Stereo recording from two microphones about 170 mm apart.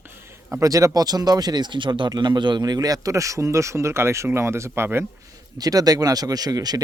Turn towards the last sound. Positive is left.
turn(degrees=-20)  # may be behind; listen again after turning